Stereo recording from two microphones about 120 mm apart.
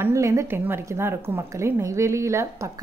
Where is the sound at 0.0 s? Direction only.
25° right (ahead or behind).